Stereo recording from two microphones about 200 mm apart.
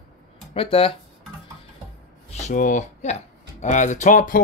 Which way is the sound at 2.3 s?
35° left (ahead or behind).